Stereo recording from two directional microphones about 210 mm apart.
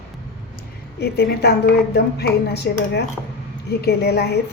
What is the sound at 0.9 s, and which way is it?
A woman's voice, 50° left (ahead or behind).